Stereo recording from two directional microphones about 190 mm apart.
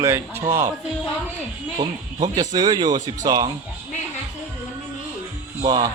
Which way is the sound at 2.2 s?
20° right (ahead or behind).